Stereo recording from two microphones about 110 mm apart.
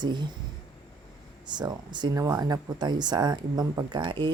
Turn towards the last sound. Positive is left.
turn(degrees=-45)  # may be behind; listen again after turning